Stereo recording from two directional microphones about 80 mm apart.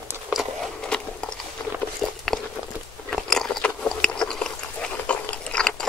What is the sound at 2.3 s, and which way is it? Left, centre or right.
Walk, centre.